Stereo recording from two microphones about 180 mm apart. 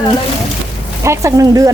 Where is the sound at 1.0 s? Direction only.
15° right (ahead or behind).